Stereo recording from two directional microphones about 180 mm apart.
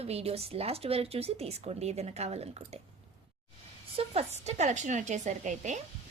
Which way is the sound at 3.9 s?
35° right (ahead or behind).